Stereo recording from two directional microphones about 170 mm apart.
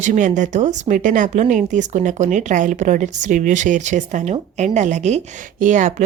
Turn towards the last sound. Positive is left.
turn(degrees=-45)  # may be behind; listen again after turning